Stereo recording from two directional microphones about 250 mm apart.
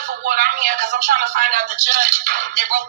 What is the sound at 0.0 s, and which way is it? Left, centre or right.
Speech, right.